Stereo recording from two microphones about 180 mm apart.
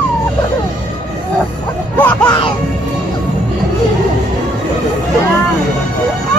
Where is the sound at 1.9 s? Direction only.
10° left (ahead or behind).